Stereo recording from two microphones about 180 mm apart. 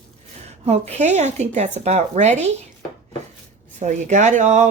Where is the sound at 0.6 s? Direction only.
35° right (ahead or behind).